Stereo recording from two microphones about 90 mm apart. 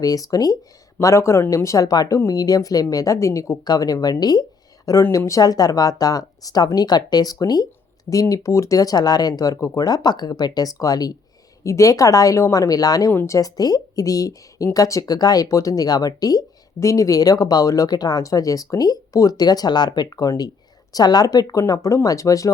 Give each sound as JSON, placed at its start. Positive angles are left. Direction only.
{"t": 0.0, "sound": "a woman's voice", "side_deg": 45}
{"t": 0.9, "sound": "speech", "side_deg": 30}
{"t": 3.6, "sound": "a woman's voice", "side_deg": 45}
{"t": 13.1, "sound": "a woman's voice", "side_deg": 30}